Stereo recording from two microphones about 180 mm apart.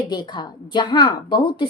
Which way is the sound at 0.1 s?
25° left (ahead or behind).